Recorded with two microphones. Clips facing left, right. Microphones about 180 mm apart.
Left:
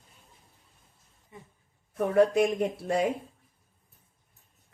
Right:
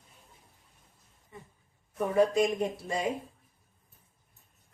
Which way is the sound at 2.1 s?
60° left (ahead or behind).